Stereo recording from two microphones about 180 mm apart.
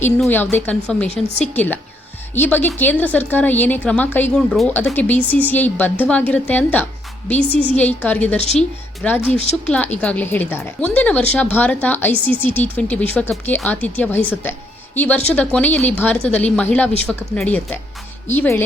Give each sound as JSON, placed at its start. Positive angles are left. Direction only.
{"t": 0.3, "sound": "a woman's voice", "side_deg": 10}
{"t": 8.4, "sound": "speech", "side_deg": 35}
{"t": 9.0, "sound": "a woman's voice", "side_deg": 10}